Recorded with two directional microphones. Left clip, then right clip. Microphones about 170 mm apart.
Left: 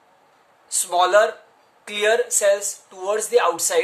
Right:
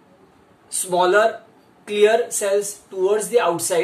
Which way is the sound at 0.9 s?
40° left (ahead or behind).